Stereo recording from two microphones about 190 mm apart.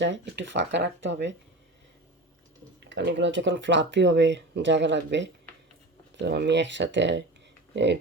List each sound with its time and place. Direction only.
0.0 s speech: 70° right (ahead or behind)
2.8 s speech: 70° right (ahead or behind)